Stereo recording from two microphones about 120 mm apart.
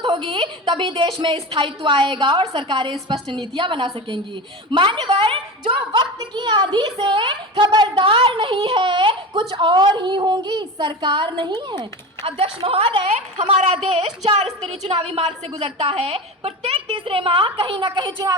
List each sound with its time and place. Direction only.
0.0 s a woman's voice: 40° right (ahead or behind)
12.2 s a woman's voice: 50° right (ahead or behind); by 18.3 s 35° right (ahead or behind)